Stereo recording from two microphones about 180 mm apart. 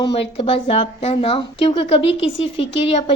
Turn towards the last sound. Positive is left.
turn(degrees=35)  # may be behind; listen again after turning